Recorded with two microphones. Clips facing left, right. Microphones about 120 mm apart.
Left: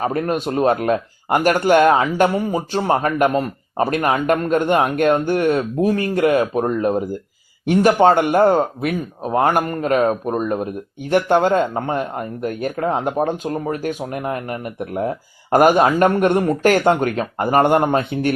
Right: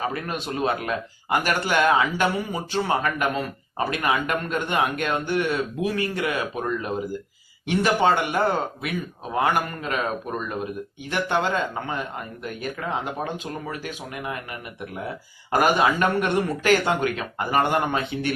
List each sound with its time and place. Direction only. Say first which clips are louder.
0.0 s speech: left 8 dB; 45° left (ahead or behind)